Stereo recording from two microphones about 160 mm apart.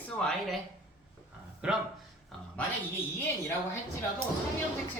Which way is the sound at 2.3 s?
5° left (ahead or behind).